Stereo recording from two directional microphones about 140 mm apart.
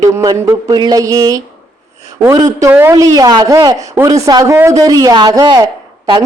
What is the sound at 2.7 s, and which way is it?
Speech, 15° right (ahead or behind).